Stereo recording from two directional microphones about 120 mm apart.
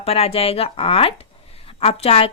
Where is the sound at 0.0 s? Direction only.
55° left (ahead or behind).